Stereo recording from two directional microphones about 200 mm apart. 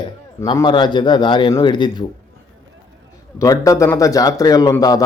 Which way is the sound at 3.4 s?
15° left (ahead or behind).